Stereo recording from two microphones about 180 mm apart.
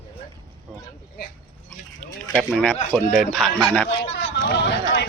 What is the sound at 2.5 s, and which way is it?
A man's voice, 5° left (ahead or behind).